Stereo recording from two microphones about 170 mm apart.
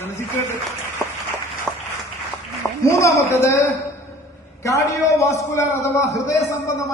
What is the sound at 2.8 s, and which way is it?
Speech, 15° left (ahead or behind).